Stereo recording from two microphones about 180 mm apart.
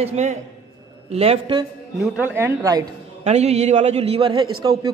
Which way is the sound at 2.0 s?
10° right (ahead or behind).